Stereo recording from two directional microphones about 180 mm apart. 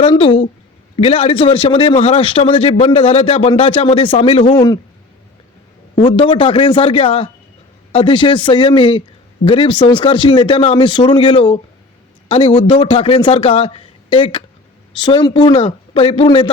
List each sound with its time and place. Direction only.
0.0 s a man's voice: 30° left (ahead or behind)
6.1 s speech: 30° left (ahead or behind)